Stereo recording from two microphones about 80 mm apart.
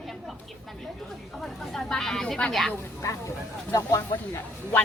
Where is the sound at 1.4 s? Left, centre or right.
Centre.